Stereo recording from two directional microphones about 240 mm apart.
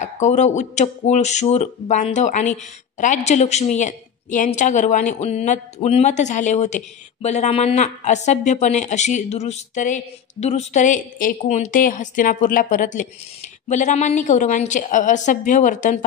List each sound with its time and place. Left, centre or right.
0.0 s a woman's voice: left